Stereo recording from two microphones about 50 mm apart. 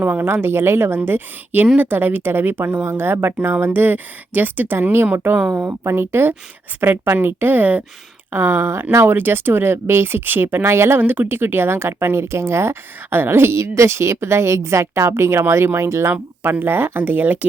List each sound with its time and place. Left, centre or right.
0.0 s speech: right
6.7 s speech: right
8.3 s speech: right
9.1 s speech: right
11.0 s speech: right
16.5 s speech: right